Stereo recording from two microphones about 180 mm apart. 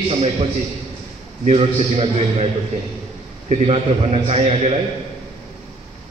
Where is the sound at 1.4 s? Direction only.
35° right (ahead or behind).